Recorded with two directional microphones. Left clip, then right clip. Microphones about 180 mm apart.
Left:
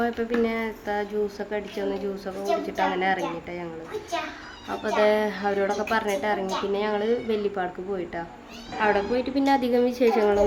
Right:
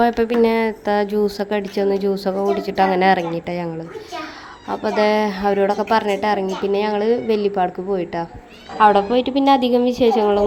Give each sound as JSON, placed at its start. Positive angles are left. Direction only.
{"t": 0.0, "sound": "speech", "side_deg": -40}
{"t": 4.7, "sound": "a woman's voice", "side_deg": -30}